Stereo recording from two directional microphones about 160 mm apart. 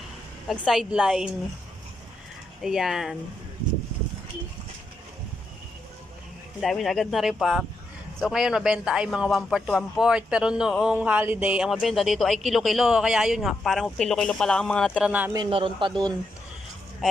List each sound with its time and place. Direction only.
0.4 s a man's voice: 5° left (ahead or behind)
2.6 s a man's voice: centre (ahead or behind)
6.6 s a man's voice: centre (ahead or behind)
14.9 s speech: 10° right (ahead or behind)
15.4 s speech: 35° right (ahead or behind)
17.0 s a sound: centre (ahead or behind)